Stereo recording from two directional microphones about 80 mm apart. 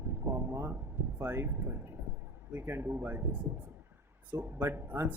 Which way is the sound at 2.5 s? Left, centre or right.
Right.